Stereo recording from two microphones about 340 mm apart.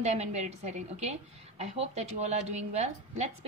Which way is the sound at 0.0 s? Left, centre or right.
Centre.